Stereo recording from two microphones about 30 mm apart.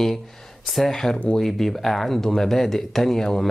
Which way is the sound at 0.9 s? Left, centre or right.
Left.